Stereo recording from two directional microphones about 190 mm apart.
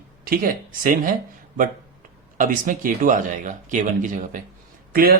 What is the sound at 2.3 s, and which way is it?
Speech, 45° right (ahead or behind).